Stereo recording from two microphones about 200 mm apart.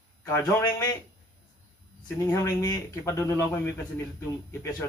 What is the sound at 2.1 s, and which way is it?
A man's voice, 15° left (ahead or behind).